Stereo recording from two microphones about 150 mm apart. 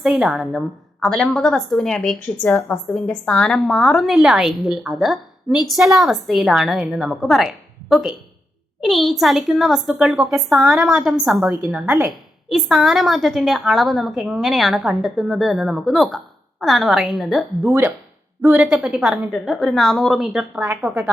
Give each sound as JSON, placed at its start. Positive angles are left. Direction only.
{"t": 0.0, "sound": "a woman's voice", "side_deg": 0}
{"t": 11.4, "sound": "a woman's voice", "side_deg": -25}
{"t": 11.7, "sound": "a woman's voice", "side_deg": -10}
{"t": 12.5, "sound": "a woman's voice", "side_deg": 0}
{"t": 17.7, "sound": "a woman's voice", "side_deg": -10}